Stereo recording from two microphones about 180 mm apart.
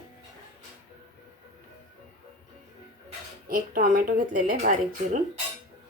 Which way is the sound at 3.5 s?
50° right (ahead or behind).